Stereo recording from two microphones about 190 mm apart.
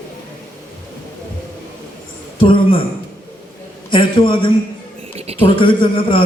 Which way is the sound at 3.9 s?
25° left (ahead or behind).